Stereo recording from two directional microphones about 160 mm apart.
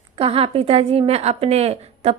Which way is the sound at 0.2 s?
35° right (ahead or behind).